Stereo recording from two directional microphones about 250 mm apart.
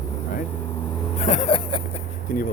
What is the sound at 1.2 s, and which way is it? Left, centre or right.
Speech, left.